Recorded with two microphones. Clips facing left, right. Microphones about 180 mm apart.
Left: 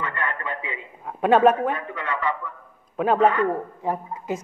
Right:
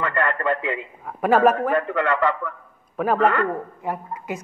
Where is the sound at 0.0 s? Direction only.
70° right (ahead or behind).